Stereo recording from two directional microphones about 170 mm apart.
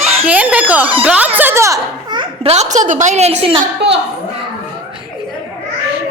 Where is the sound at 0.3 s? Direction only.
10° right (ahead or behind); by 3.6 s 35° right (ahead or behind).